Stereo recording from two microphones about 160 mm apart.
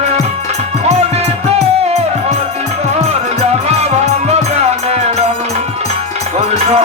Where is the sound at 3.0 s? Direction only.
40° right (ahead or behind).